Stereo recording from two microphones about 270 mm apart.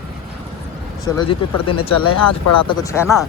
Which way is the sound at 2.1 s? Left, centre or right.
Left.